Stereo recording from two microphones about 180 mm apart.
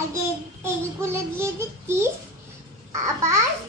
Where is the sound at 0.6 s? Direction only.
15° right (ahead or behind).